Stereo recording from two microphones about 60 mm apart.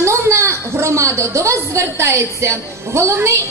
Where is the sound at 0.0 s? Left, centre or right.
Right.